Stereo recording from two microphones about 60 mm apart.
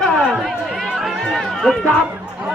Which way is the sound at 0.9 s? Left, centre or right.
Centre.